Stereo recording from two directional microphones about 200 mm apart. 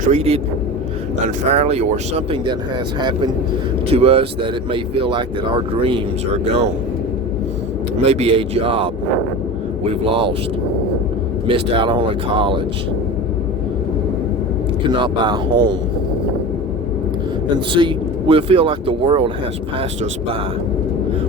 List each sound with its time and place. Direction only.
0.1 s speech: 30° right (ahead or behind)
1.5 s speech: 30° right (ahead or behind)
8.0 s speech: 30° right (ahead or behind)
10.1 s speech: 25° right (ahead or behind)
11.4 s speech: 25° right (ahead or behind)
14.8 s speech: 20° right (ahead or behind)
17.5 s speech: 25° right (ahead or behind)